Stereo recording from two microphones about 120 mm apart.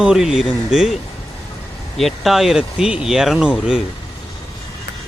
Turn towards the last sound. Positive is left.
turn(degrees=-5)  # may be behind; listen again after turning